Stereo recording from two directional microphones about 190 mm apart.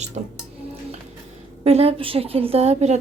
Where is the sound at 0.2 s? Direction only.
40° right (ahead or behind).